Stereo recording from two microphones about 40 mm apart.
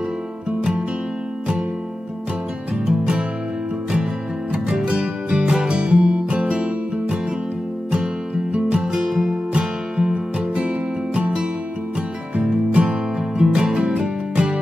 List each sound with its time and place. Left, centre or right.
0.5 s music: right
2.9 s music: right
4.5 s music: right
8.8 s music: centre
9.5 s music: right
11.1 s music: right